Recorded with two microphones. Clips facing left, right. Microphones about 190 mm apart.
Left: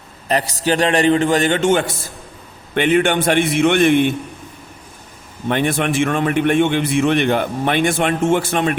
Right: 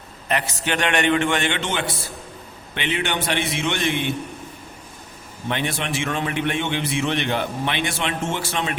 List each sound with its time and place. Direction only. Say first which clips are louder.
0.3 s a man's voice: left 6 dB; 35° left (ahead or behind); by 4.1 s 55° left (ahead or behind)
5.5 s a man's voice: left 8 dB; 50° left (ahead or behind)